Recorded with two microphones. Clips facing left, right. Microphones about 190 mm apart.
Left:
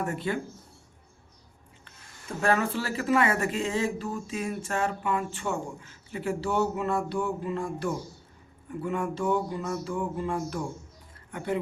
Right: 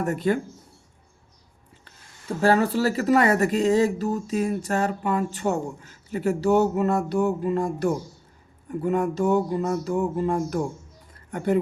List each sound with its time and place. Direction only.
0.0 s speech: 40° right (ahead or behind)
2.4 s speech: 35° right (ahead or behind)